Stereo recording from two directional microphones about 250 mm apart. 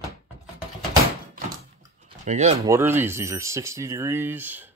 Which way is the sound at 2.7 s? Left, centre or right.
Centre.